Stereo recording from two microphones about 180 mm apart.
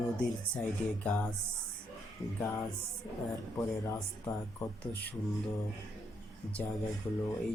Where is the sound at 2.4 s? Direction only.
20° left (ahead or behind).